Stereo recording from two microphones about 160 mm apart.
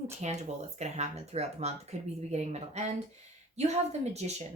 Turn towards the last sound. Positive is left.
turn(degrees=-45)  # may be behind; listen again after turning